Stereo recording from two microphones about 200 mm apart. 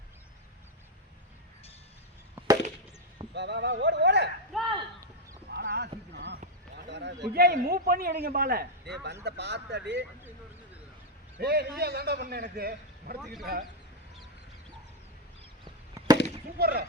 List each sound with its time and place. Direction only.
3.3 s speech: 60° right (ahead or behind)
4.5 s a sound: centre (ahead or behind)
5.5 s clip-clop: 55° right (ahead or behind)
6.7 s a sound: 60° right (ahead or behind)
7.3 s a man's voice: 50° right (ahead or behind)
11.3 s a man's voice: 50° right (ahead or behind)
16.0 s fireworks: 15° right (ahead or behind)
16.6 s a man's voice: 50° right (ahead or behind)